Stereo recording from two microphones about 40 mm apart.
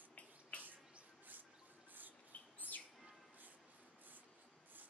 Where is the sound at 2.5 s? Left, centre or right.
Left.